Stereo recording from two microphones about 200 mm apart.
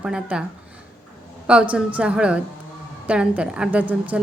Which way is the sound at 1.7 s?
5° right (ahead or behind).